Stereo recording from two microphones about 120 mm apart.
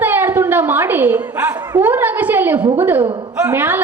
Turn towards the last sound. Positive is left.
turn(degrees=-15)  # may be behind; listen again after turning